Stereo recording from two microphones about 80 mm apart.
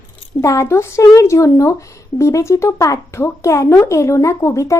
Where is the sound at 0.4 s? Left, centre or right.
Left.